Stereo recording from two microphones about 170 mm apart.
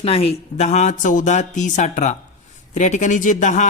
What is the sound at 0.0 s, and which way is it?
Speech, 35° left (ahead or behind).